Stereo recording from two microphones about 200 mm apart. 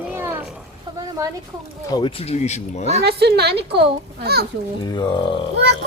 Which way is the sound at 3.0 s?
55° right (ahead or behind).